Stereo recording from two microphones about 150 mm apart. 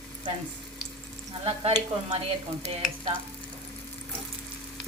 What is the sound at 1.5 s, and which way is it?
Stir, 45° right (ahead or behind).